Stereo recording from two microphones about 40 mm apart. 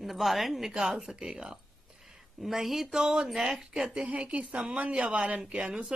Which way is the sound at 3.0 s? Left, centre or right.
Centre.